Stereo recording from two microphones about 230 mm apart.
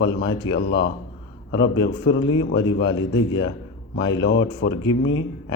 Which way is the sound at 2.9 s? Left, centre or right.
Centre.